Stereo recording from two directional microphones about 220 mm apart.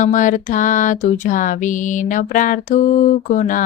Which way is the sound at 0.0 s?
35° left (ahead or behind).